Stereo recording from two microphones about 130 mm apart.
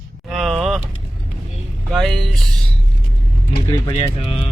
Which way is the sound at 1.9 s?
Centre (ahead or behind).